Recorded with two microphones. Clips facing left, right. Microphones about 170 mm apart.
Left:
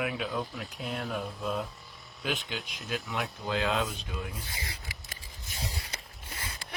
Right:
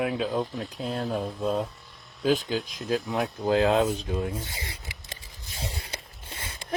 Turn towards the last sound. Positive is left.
turn(degrees=-25)  # may be behind; listen again after turning